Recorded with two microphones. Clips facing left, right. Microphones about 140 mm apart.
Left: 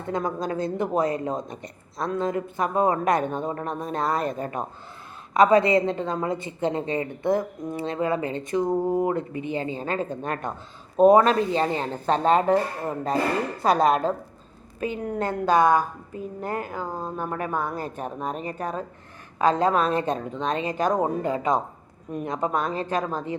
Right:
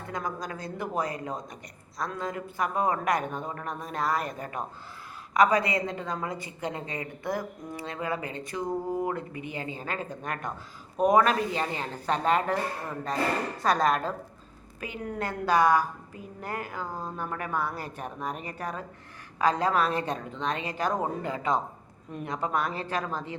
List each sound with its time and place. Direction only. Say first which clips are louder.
0.1 s a woman's voice: left 8 dB; 25° left (ahead or behind)